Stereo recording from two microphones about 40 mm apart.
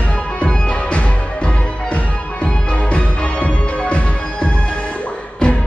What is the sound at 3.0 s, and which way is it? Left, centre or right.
Music, left.